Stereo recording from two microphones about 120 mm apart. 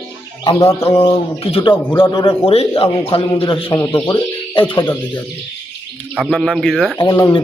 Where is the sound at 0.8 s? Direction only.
50° left (ahead or behind).